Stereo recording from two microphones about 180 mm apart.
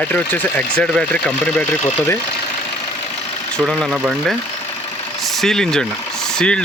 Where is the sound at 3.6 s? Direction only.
5° right (ahead or behind).